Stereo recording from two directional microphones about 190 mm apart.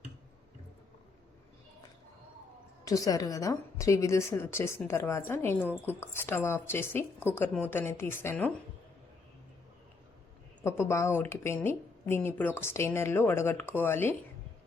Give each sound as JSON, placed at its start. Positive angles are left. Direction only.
{"t": 2.8, "sound": "speech", "side_deg": 15}
{"t": 10.6, "sound": "speech", "side_deg": 15}